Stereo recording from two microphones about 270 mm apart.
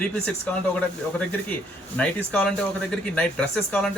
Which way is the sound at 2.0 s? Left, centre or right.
Centre.